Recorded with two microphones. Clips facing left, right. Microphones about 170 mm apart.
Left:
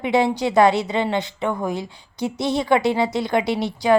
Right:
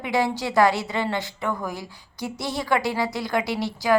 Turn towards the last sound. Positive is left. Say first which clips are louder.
# left 4 dB
turn(degrees=20)  # may be behind; listen again after turning